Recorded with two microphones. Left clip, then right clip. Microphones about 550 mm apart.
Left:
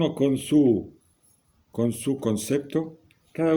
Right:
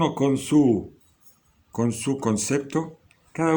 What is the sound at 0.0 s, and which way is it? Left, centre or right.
Speech, left.